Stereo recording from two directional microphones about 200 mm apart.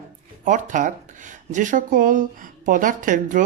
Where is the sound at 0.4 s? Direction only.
40° right (ahead or behind).